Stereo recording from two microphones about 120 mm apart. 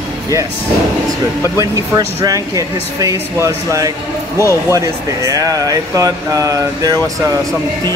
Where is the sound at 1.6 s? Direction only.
30° right (ahead or behind).